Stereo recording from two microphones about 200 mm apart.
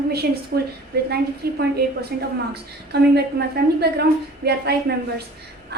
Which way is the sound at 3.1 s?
55° right (ahead or behind).